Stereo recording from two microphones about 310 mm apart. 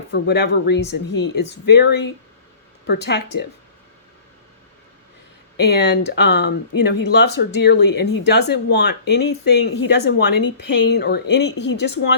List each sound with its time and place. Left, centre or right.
0.1 s speech: left
5.5 s speech: left